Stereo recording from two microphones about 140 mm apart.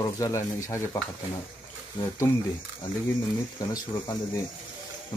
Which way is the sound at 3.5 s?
25° left (ahead or behind).